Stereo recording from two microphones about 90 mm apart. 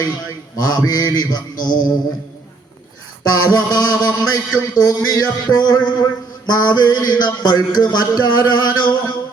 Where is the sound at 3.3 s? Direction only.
45° left (ahead or behind).